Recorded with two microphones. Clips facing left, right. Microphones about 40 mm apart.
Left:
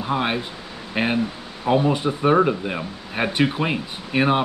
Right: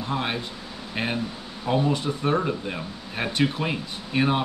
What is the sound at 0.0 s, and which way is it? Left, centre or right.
Speech, centre.